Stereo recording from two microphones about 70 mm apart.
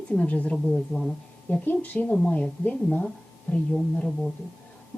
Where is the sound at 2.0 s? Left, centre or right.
Centre.